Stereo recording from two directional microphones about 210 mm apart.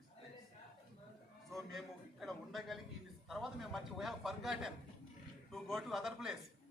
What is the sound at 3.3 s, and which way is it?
A man's voice, centre (ahead or behind).